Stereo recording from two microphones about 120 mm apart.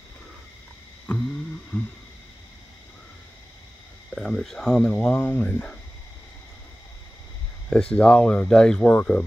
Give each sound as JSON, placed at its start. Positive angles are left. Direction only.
{"t": 1.1, "sound": "a sound", "side_deg": 10}
{"t": 4.1, "sound": "speech", "side_deg": 5}
{"t": 7.7, "sound": "speech", "side_deg": 5}